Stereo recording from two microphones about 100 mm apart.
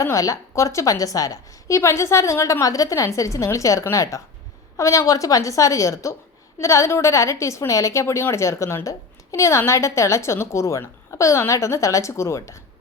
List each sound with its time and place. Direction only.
0.0 s a woman's voice: 35° left (ahead or behind)